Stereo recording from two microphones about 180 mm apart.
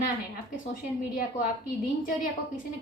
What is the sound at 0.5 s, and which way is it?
Speech, 55° left (ahead or behind).